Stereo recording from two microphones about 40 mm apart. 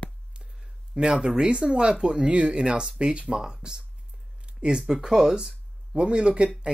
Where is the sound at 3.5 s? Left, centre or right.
Right.